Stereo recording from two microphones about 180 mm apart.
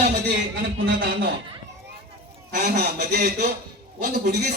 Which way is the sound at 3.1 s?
60° right (ahead or behind).